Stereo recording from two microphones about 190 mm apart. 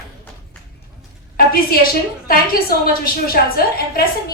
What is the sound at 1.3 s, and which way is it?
A woman's voice, 50° left (ahead or behind).